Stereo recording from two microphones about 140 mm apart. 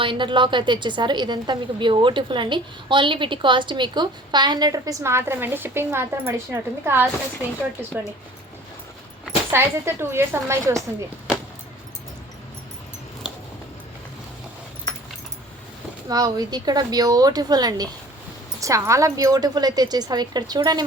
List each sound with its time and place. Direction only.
0.0 s a woman's voice: 35° right (ahead or behind); by 7.1 s 15° right (ahead or behind)
9.5 s speech: 15° right (ahead or behind)
16.0 s a woman's voice: 25° right (ahead or behind)